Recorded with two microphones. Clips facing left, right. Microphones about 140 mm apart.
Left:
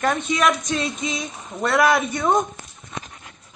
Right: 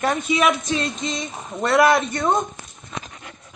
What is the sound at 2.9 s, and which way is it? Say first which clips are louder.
Dog: right 1 dB; 90° right.